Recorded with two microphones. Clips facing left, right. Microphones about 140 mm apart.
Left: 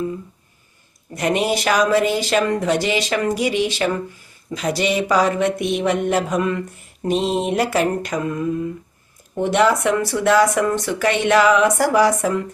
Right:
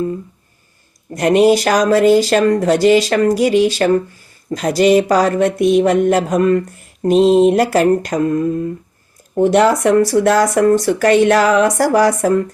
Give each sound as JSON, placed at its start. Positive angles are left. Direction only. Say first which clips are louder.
{"t": 1.1, "sound": "speech", "louder": "right 9 dB", "side_deg": -40}
{"t": 4.5, "sound": "a sound", "louder": "right 8 dB", "side_deg": -45}
{"t": 7.5, "sound": "speech", "louder": "right 6 dB", "side_deg": -40}